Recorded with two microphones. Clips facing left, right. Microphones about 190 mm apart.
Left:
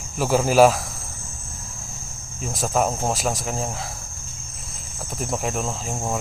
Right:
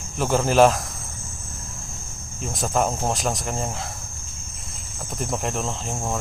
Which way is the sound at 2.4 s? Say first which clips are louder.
Left 1 dB; centre (ahead or behind).